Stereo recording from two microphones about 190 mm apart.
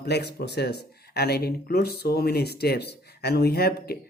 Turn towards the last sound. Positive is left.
turn(degrees=55)  # may be behind; listen again after turning